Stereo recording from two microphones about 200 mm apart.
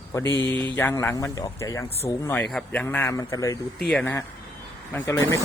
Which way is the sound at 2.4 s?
5° left (ahead or behind).